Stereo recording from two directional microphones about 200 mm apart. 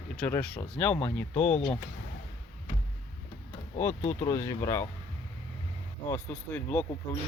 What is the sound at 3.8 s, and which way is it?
Speech, 10° left (ahead or behind).